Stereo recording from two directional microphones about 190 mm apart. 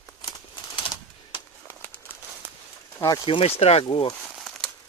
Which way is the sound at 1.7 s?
10° left (ahead or behind).